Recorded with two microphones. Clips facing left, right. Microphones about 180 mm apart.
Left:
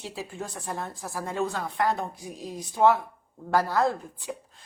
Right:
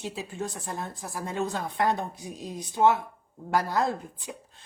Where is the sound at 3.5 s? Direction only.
20° right (ahead or behind).